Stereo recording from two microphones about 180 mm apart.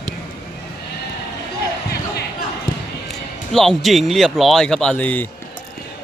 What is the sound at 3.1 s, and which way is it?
Speech, centre (ahead or behind).